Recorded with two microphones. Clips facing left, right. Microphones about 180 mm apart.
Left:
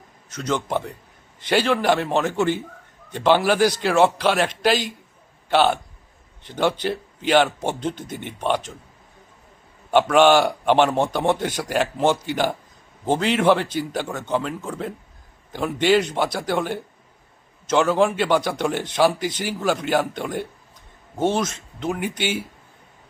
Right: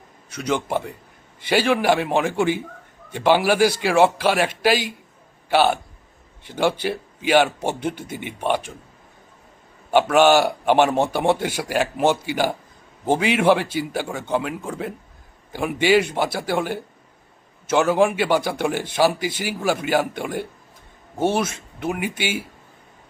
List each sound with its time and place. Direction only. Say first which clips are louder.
0.3 s a man's voice: right 1 dB; 10° right (ahead or behind)
9.9 s a man's voice: even; 5° right (ahead or behind)